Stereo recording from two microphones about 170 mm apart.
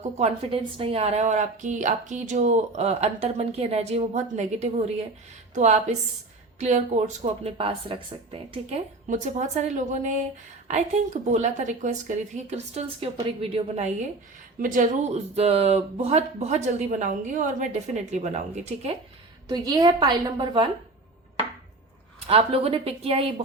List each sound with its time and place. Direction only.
0.0 s speech: 40° right (ahead or behind)
8.7 s speech: 45° right (ahead or behind)
14.6 s speech: 50° right (ahead or behind)
19.5 s a woman's voice: 25° right (ahead or behind)
22.3 s speech: 35° right (ahead or behind)